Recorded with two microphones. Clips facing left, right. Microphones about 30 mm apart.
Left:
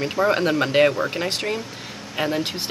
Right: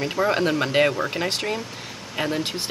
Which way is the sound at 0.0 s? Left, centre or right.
Centre.